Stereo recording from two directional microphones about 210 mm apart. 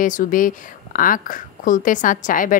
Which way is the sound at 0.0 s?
40° left (ahead or behind).